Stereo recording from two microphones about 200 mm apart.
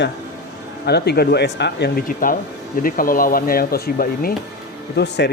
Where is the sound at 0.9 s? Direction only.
55° left (ahead or behind).